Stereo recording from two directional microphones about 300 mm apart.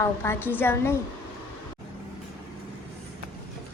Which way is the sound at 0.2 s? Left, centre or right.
Centre.